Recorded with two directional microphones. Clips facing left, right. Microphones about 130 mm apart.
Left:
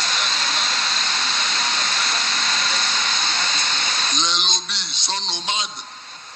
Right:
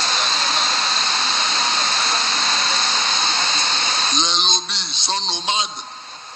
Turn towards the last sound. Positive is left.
turn(degrees=-25)  # may be behind; listen again after turning